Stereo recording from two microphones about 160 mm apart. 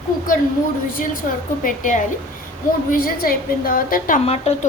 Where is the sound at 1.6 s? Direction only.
55° left (ahead or behind).